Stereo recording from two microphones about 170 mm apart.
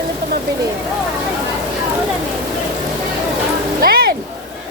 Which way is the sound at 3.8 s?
60° right (ahead or behind).